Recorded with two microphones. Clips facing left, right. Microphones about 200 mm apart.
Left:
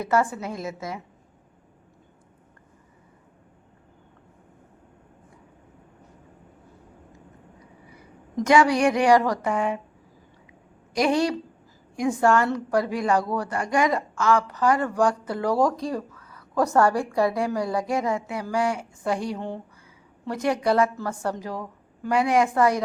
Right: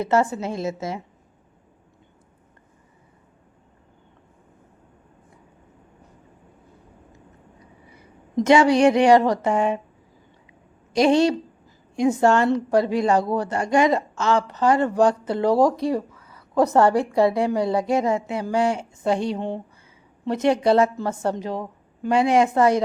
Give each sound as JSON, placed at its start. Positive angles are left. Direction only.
{"t": 0.0, "sound": "a woman's voice", "side_deg": -25}
{"t": 8.4, "sound": "a woman's voice", "side_deg": -25}
{"t": 10.9, "sound": "a woman's voice", "side_deg": -25}